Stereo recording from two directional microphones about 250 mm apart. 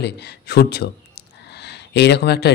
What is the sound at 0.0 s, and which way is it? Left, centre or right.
A man's voice, left.